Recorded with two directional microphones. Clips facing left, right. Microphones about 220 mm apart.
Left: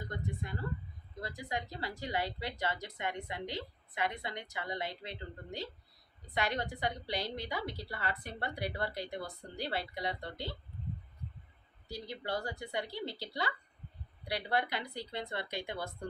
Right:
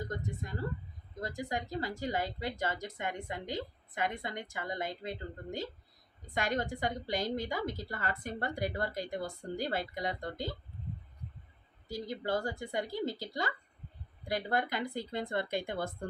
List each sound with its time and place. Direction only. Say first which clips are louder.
1.2 s speech: right 3 dB; 45° right (ahead or behind)
11.9 s speech: right 4 dB; 50° right (ahead or behind)